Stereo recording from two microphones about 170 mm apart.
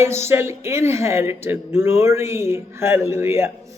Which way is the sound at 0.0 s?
15° right (ahead or behind).